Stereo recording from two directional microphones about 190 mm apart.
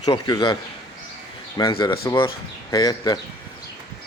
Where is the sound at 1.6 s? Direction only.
25° left (ahead or behind).